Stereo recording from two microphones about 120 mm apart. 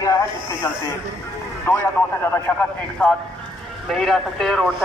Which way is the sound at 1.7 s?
20° left (ahead or behind).